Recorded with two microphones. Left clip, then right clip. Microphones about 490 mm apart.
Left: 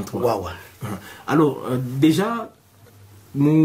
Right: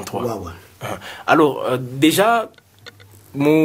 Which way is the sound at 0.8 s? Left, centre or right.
Right.